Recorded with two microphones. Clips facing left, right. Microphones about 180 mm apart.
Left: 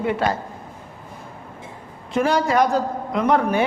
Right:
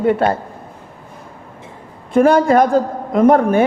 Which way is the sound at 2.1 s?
50° right (ahead or behind).